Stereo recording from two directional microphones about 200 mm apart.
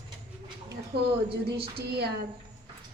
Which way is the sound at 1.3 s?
55° right (ahead or behind).